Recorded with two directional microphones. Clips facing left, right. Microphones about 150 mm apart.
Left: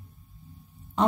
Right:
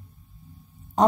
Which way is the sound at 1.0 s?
40° right (ahead or behind).